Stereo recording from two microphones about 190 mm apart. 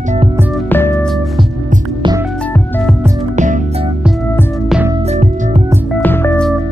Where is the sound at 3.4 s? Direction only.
40° right (ahead or behind).